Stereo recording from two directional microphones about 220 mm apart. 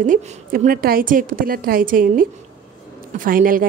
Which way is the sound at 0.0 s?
40° right (ahead or behind).